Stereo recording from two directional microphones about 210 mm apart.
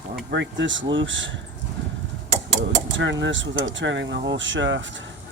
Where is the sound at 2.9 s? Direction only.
60° right (ahead or behind).